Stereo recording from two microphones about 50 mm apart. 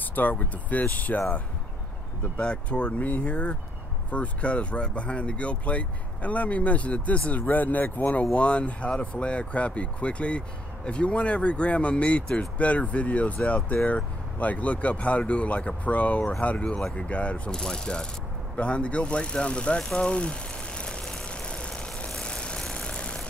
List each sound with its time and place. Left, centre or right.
0.0 s speech: left
2.3 s speech: left
17.5 s ratchet: centre
18.6 s a sound: left
22.2 s vehicle: centre